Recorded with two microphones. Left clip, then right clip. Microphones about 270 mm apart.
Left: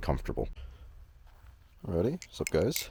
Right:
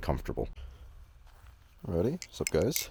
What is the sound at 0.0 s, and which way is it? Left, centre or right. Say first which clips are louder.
Speech: even; centre.